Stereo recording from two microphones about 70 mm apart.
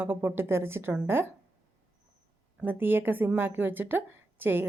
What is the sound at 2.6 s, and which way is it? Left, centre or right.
A woman's voice, right.